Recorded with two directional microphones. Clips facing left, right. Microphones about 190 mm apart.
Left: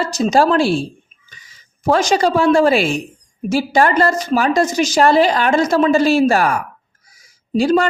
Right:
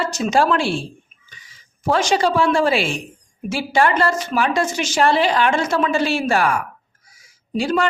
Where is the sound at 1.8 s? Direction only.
40° left (ahead or behind).